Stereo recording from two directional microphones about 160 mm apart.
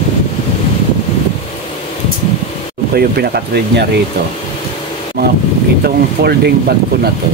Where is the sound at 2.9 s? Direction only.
75° right (ahead or behind).